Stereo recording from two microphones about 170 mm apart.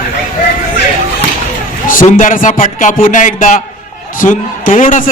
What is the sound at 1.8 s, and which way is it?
A man's voice, 50° left (ahead or behind).